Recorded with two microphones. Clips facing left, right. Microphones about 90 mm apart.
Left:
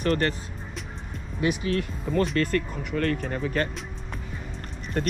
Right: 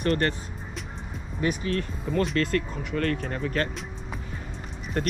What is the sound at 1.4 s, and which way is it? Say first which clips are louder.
Speech: left 2 dB; 5° left (ahead or behind).